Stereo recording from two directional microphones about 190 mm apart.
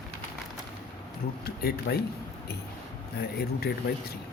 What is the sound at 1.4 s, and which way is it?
Speech, 55° left (ahead or behind).